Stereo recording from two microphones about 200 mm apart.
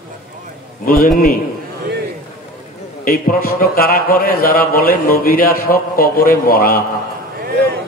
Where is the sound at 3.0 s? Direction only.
45° left (ahead or behind).